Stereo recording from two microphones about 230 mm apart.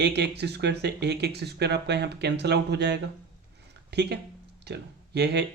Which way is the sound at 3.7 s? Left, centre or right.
Right.